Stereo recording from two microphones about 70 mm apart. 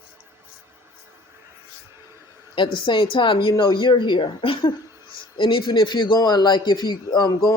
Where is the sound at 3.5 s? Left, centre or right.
Left.